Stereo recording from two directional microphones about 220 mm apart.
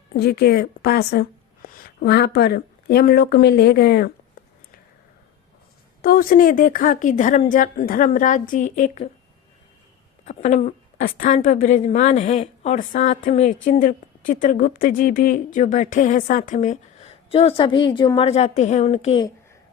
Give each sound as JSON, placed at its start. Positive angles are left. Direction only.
{"t": 0.1, "sound": "a woman's voice", "side_deg": 45}
{"t": 6.0, "sound": "a woman's voice", "side_deg": 40}
{"t": 10.2, "sound": "a woman's voice", "side_deg": 35}